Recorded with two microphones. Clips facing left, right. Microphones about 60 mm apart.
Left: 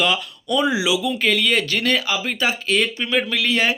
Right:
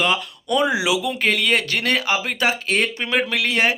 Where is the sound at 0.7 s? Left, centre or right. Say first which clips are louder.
Even; right.